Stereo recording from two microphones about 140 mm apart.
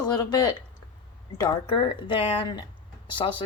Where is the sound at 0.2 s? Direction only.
30° left (ahead or behind).